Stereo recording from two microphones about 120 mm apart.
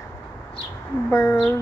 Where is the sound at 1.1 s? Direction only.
25° left (ahead or behind).